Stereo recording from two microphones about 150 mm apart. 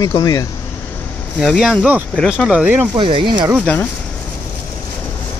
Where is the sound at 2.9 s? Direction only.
35° right (ahead or behind).